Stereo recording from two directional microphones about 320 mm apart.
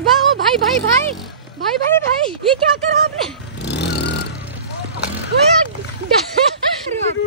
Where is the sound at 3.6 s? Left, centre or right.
Left.